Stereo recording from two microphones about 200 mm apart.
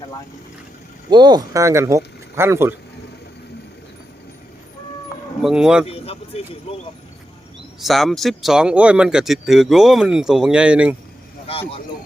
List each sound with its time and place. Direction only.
1.1 s speech: 20° right (ahead or behind)
5.4 s speech: 5° right (ahead or behind)
5.8 s speech: 30° left (ahead or behind)
7.8 s speech: centre (ahead or behind)